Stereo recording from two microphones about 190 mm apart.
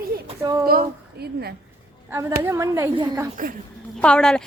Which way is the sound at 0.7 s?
55° right (ahead or behind).